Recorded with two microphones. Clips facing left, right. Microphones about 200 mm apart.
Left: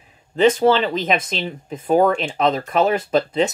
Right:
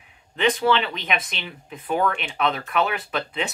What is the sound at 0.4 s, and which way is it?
Speech, 40° left (ahead or behind).